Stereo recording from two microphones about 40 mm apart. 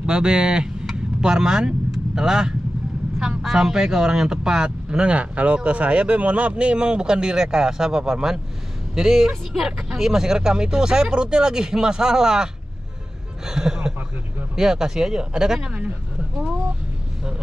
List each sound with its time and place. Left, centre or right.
0.0 s speech: right
13.5 s speech: centre